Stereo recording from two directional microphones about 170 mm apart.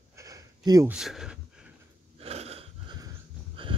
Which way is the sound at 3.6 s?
30° right (ahead or behind).